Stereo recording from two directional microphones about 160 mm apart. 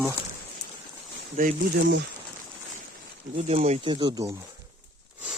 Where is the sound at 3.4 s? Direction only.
40° right (ahead or behind).